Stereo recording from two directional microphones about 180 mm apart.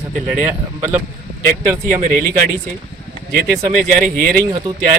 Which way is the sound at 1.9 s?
40° right (ahead or behind).